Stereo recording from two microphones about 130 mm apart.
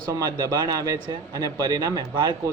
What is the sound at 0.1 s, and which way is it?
Speech, 30° right (ahead or behind).